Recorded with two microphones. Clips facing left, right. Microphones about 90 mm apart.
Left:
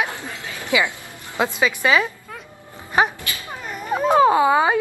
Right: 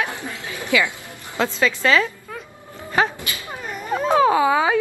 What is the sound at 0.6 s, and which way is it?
A woman's voice, 20° left (ahead or behind).